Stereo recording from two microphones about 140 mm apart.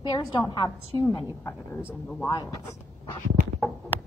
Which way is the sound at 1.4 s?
15° left (ahead or behind).